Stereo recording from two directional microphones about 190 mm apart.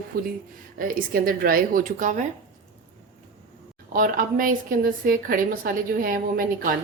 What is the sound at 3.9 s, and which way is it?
A woman's voice, 45° right (ahead or behind).